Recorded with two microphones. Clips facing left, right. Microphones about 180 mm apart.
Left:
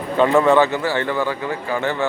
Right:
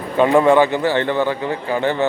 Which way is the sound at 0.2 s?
15° right (ahead or behind).